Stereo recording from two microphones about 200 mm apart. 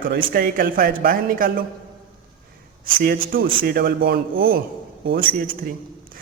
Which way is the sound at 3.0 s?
45° right (ahead or behind).